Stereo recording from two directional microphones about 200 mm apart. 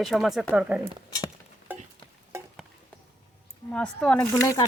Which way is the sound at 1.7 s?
10° right (ahead or behind).